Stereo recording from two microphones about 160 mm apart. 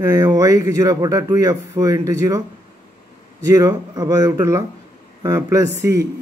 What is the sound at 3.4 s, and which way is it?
Speech, 20° right (ahead or behind).